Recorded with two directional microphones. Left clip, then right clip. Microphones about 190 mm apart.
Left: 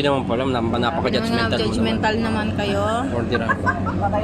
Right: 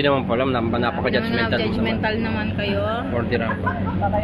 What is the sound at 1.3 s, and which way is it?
Speech, 50° left (ahead or behind).